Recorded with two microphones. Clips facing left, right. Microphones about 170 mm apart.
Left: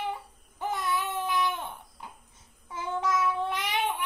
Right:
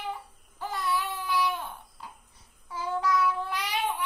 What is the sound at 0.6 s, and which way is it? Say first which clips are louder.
Baby cry: left 1 dB; 20° left (ahead or behind).